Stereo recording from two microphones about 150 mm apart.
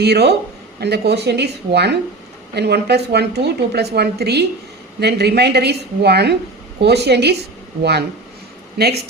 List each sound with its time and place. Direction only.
0.0 s a woman's voice: 90° right